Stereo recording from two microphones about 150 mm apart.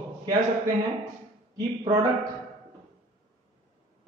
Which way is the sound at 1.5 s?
25° right (ahead or behind).